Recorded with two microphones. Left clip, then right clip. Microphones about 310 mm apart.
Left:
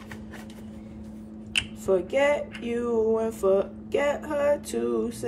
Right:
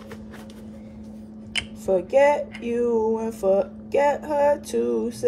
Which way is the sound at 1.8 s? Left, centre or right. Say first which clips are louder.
Right 5 dB; centre.